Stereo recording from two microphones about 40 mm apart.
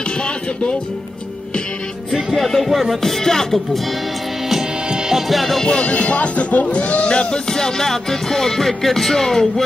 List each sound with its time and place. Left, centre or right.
2.3 s music: centre
2.9 s speech: centre
4.8 s music: centre
5.1 s music: centre
5.8 s speech: left; by 9.7 s centre